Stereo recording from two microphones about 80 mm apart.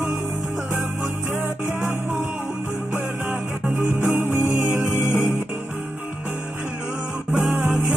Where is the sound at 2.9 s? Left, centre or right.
Right.